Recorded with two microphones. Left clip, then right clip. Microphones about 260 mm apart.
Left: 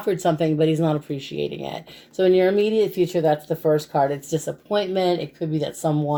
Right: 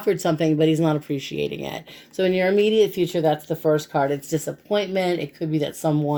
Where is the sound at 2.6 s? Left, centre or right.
Centre.